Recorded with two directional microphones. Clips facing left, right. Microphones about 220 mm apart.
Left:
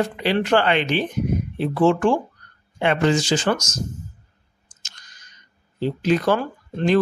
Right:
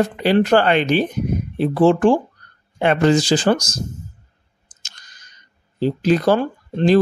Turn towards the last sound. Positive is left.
turn(degrees=-30)  # may be behind; listen again after turning